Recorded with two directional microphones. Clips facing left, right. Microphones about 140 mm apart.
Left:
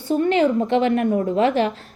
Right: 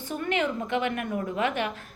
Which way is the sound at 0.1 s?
30° left (ahead or behind).